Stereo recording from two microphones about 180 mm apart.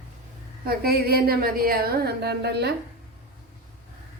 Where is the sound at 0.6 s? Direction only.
60° right (ahead or behind).